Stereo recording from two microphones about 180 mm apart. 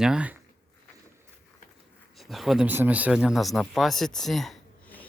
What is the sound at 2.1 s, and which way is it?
Speech, centre (ahead or behind).